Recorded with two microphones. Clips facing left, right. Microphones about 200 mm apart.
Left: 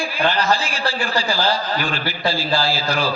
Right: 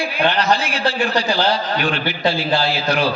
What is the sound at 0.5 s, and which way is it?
Speech, 65° right (ahead or behind).